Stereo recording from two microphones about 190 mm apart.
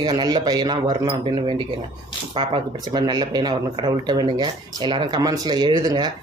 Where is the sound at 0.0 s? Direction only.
20° right (ahead or behind).